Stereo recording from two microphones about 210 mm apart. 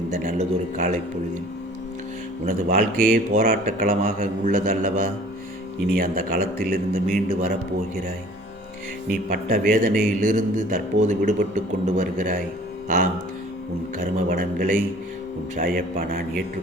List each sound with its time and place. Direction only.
0.1 s a man's voice: 40° right (ahead or behind)
2.4 s a man's voice: 40° right (ahead or behind)
9.3 s a man's voice: 40° right (ahead or behind)
14.0 s a man's voice: 40° right (ahead or behind)